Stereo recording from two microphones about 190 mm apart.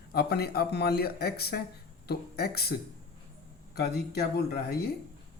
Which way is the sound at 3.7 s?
60° left (ahead or behind).